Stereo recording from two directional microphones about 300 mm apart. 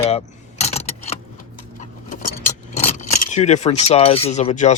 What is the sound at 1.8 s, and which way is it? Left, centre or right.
Keys jangling, left.